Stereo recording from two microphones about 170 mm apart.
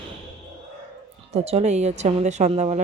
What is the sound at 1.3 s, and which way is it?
Speech, 40° right (ahead or behind).